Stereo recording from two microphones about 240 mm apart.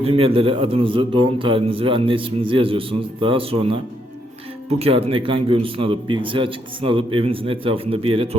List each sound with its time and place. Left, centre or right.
0.0 s a man's voice: right